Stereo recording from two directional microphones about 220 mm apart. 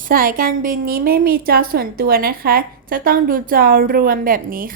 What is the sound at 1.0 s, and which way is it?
A woman's voice, 45° right (ahead or behind).